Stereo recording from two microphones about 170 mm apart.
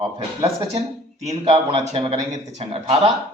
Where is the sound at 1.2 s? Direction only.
35° right (ahead or behind).